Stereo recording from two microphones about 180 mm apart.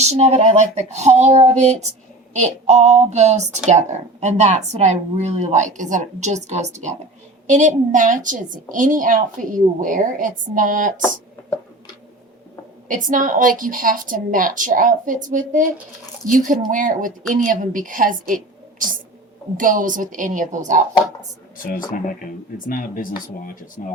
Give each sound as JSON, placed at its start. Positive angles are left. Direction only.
{"t": 0.0, "sound": "a woman's voice", "side_deg": -35}
{"t": 12.9, "sound": "a woman's voice", "side_deg": -45}
{"t": 19.5, "sound": "a woman's voice", "side_deg": -45}
{"t": 21.9, "sound": "speech", "side_deg": 50}